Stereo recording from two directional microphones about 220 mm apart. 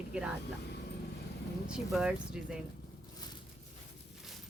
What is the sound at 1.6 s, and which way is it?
Speech, 5° right (ahead or behind).